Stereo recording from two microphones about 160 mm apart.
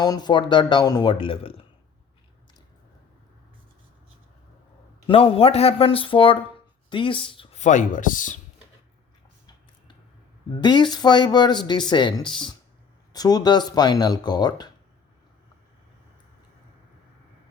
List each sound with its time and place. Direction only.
0.0 s speech: 25° left (ahead or behind)
5.0 s a man's voice: 35° left (ahead or behind)
7.6 s speech: 50° left (ahead or behind)
10.6 s speech: 25° left (ahead or behind)